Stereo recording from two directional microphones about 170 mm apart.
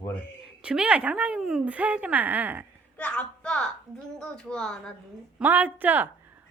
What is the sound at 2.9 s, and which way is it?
A woman's voice, 5° left (ahead or behind).